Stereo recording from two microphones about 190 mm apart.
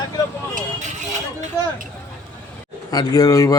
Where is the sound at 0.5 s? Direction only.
40° right (ahead or behind).